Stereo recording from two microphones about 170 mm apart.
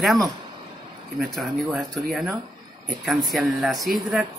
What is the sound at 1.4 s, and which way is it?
A man's voice, centre (ahead or behind).